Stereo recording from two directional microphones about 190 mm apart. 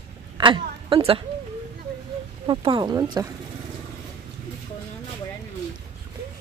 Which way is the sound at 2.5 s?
25° right (ahead or behind).